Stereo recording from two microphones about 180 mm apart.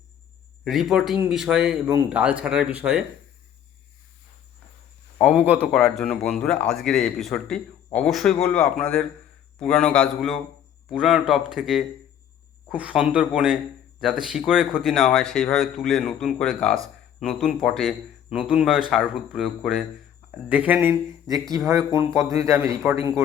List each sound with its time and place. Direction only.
0.6 s speech: centre (ahead or behind)
5.2 s a man's voice: 5° right (ahead or behind)
21.9 s a man's voice: 15° right (ahead or behind)